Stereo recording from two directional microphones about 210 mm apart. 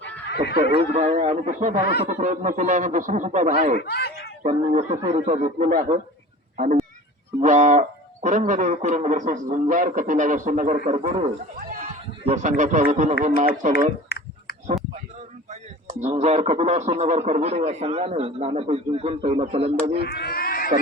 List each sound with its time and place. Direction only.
0.0 s a sound: 50° left (ahead or behind)
0.7 s speech: 30° right (ahead or behind)
3.8 s a sound: 50° left (ahead or behind)
4.4 s speech: 35° right (ahead or behind)
7.4 s speech: 35° right (ahead or behind)
15.4 s speech: 30° right (ahead or behind)
20.1 s cat: 50° left (ahead or behind)